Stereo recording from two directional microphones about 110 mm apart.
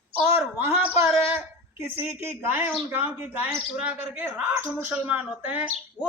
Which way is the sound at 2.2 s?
20° right (ahead or behind).